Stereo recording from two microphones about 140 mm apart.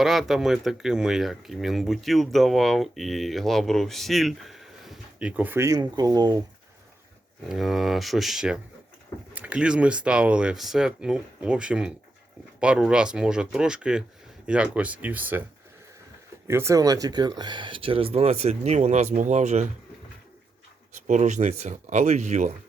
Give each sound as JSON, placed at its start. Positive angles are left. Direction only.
{"t": 0.0, "sound": "speech", "side_deg": 0}
{"t": 5.4, "sound": "speech", "side_deg": -15}
{"t": 7.4, "sound": "speech", "side_deg": 0}
{"t": 16.5, "sound": "speech", "side_deg": -20}
{"t": 21.1, "sound": "speech", "side_deg": -60}